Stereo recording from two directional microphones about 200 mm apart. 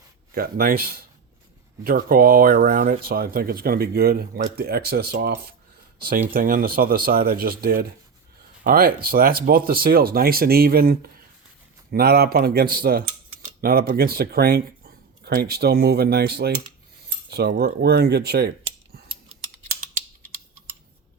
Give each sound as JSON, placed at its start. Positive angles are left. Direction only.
{"t": 0.3, "sound": "speech", "side_deg": -45}